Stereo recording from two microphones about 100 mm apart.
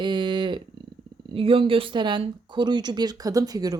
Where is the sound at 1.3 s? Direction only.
65° right (ahead or behind).